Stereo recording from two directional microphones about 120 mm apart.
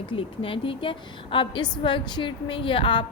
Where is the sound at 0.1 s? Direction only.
45° left (ahead or behind).